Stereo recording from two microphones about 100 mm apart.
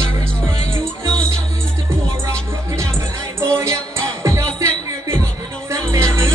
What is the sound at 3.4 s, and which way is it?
Music, 25° right (ahead or behind).